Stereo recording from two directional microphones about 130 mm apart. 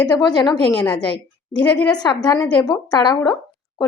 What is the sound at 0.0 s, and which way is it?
Speech, 30° left (ahead or behind).